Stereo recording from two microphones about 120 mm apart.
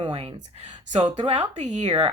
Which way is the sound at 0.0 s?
45° right (ahead or behind).